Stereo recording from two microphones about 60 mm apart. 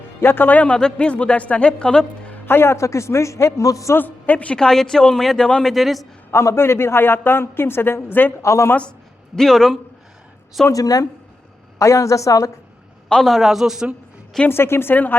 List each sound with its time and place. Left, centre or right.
0.2 s a man's voice: left; by 2.3 s centre
2.5 s a man's voice: left
3.9 s a man's voice: left
4.5 s a man's voice: centre
6.3 s a man's voice: left
8.4 s a man's voice: left
9.3 s a man's voice: centre
10.7 s speech: left
11.8 s a man's voice: left
13.2 s a man's voice: centre
14.4 s a man's voice: left